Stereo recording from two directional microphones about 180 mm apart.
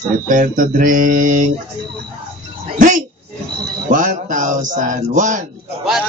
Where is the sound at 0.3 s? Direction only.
45° right (ahead or behind).